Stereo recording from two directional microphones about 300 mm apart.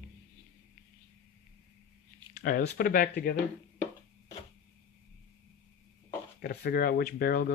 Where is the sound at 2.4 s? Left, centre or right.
Left.